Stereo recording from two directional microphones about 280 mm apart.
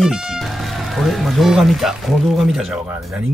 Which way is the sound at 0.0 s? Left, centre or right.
Centre.